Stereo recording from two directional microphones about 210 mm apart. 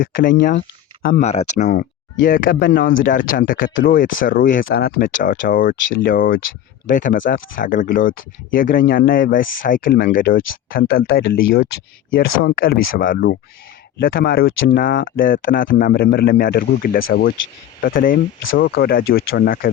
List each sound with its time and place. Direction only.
0.0 s speech: 40° left (ahead or behind)